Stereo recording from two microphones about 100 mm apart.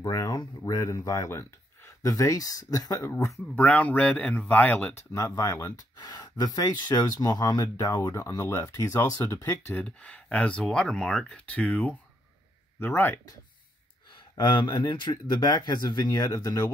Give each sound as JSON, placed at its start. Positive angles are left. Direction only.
{"t": 0.0, "sound": "a sound", "side_deg": 40}
{"t": 0.4, "sound": "speech", "side_deg": 35}
{"t": 3.5, "sound": "speech", "side_deg": 15}
{"t": 4.9, "sound": "speech", "side_deg": 30}
{"t": 8.1, "sound": "speech", "side_deg": 30}
{"t": 9.2, "sound": "speech", "side_deg": 20}
{"t": 14.3, "sound": "speech", "side_deg": 50}